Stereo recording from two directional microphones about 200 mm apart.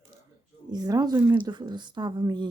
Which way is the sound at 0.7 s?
20° right (ahead or behind).